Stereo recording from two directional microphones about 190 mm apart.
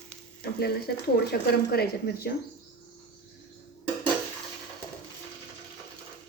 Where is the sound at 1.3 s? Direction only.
55° left (ahead or behind).